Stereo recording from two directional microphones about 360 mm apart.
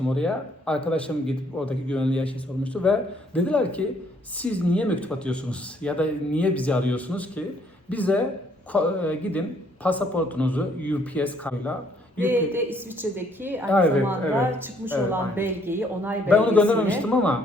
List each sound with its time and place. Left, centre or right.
0.1 s a woman's voice: centre